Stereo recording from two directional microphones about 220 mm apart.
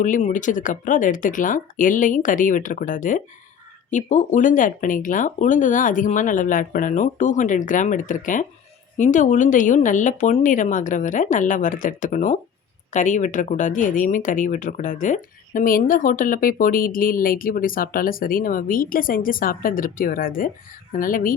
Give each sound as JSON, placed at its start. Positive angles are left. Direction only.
{"t": 0.0, "sound": "speech", "side_deg": 35}